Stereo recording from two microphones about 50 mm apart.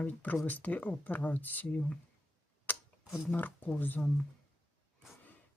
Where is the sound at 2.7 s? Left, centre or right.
Left.